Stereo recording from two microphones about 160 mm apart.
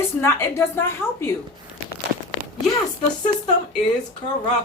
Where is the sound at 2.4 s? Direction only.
70° right (ahead or behind).